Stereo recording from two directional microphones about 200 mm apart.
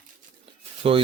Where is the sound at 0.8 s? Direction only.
25° right (ahead or behind).